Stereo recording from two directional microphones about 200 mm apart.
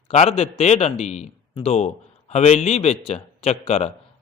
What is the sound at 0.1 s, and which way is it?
A man's voice, 30° left (ahead or behind).